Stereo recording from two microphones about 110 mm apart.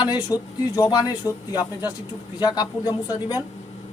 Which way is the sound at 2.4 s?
40° left (ahead or behind).